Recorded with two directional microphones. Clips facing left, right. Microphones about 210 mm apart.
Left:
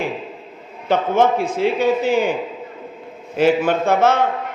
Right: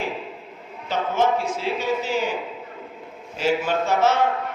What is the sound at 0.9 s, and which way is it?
A man's voice, 55° left (ahead or behind).